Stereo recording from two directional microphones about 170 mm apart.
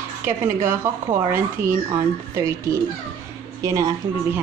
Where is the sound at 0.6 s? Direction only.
15° right (ahead or behind).